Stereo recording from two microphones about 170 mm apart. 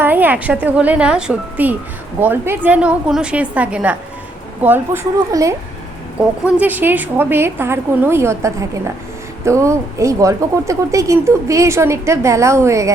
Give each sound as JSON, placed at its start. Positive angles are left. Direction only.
{"t": 0.0, "sound": "speech", "side_deg": -10}
{"t": 6.1, "sound": "speech", "side_deg": -10}